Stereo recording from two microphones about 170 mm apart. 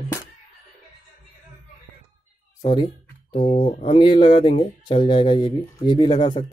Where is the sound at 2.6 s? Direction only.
25° left (ahead or behind).